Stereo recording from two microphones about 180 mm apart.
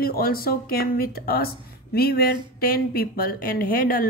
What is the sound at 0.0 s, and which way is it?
Speech, 55° left (ahead or behind).